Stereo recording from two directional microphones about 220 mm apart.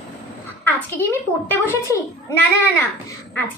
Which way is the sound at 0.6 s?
10° left (ahead or behind).